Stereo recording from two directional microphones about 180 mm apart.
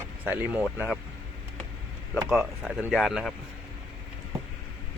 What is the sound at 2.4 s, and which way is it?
Speech, 5° right (ahead or behind).